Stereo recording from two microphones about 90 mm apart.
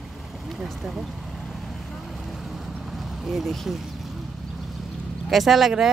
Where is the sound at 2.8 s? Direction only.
Centre (ahead or behind).